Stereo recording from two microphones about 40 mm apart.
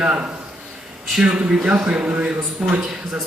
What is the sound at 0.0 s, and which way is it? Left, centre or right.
Speech, right.